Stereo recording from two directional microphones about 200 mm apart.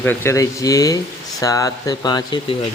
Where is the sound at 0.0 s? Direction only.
10° left (ahead or behind).